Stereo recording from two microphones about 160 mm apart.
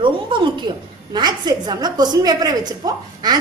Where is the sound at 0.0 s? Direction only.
30° right (ahead or behind).